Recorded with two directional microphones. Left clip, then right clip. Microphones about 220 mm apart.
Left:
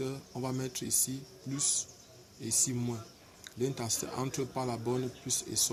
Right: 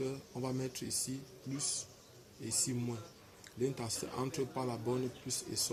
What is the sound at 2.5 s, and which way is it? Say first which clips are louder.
Speech: left 5 dB; 15° left (ahead or behind).